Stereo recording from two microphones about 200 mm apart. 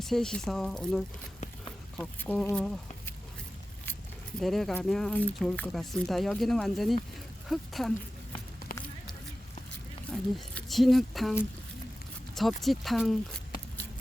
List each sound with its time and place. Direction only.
0.0 s speech: centre (ahead or behind)
4.4 s speech: centre (ahead or behind)
8.7 s a sound: 45° left (ahead or behind)
10.1 s speech: centre (ahead or behind)